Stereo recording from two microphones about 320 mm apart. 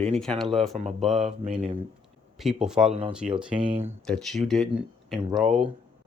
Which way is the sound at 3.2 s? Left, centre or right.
Right.